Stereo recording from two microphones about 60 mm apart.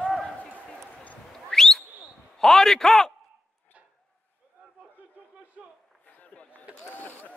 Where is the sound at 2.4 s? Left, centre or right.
Centre.